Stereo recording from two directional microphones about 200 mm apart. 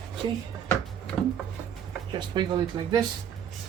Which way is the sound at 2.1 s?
20° right (ahead or behind).